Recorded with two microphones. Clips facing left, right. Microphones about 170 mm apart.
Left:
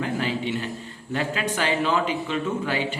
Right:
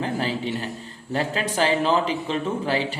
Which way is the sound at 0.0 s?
35° right (ahead or behind).